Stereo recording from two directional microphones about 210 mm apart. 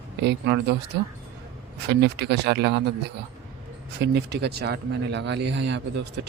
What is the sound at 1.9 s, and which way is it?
Speech, 55° right (ahead or behind).